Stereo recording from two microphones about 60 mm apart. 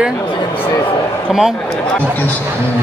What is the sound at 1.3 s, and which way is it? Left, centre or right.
Speech, centre.